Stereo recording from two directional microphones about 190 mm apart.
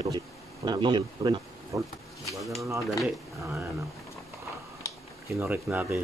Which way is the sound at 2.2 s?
Centre (ahead or behind).